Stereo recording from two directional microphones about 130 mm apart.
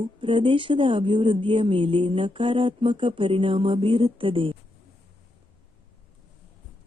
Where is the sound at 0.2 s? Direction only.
40° right (ahead or behind).